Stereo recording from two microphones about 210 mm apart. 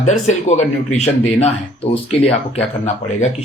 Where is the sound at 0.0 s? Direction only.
35° left (ahead or behind).